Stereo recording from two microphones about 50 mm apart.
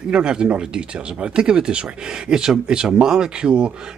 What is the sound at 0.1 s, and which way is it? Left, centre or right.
Speech, centre.